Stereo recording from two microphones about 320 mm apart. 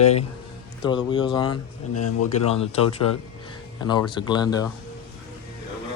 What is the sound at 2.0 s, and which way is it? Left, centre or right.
Speech, left.